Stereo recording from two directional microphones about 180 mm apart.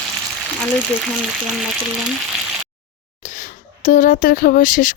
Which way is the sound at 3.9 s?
45° left (ahead or behind).